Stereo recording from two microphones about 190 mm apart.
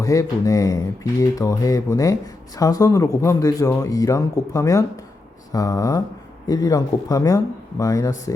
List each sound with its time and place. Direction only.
0.0 s speech: 15° left (ahead or behind)